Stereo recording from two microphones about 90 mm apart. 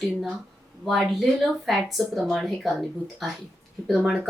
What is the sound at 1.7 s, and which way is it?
A woman's voice, centre (ahead or behind).